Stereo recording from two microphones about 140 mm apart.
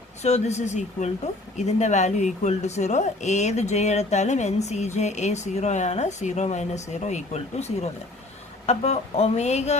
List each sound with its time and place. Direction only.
0.2 s speech: 55° left (ahead or behind)